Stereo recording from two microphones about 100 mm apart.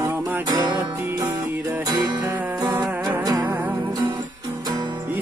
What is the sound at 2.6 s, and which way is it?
Music, 45° right (ahead or behind).